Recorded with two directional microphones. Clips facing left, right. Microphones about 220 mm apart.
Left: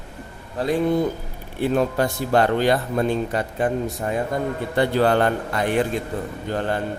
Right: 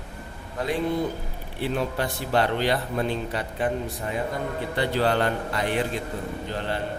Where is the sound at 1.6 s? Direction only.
45° left (ahead or behind).